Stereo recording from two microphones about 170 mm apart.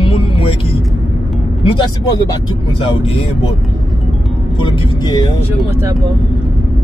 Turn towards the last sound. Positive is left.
turn(degrees=25)  # may be behind; listen again after turning